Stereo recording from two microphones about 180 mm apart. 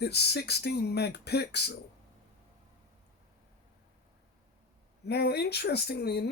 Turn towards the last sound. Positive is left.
turn(degrees=65)  # may be behind; listen again after turning